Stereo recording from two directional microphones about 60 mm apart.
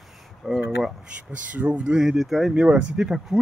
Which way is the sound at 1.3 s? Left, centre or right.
Right.